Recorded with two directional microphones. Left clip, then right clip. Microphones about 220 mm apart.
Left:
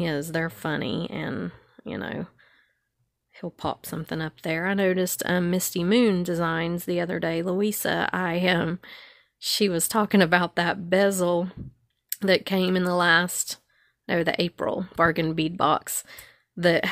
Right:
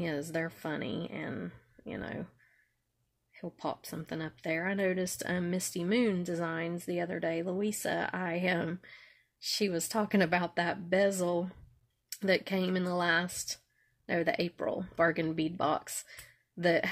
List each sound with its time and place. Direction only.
0.0 s speech: 40° left (ahead or behind)
3.3 s speech: 40° left (ahead or behind)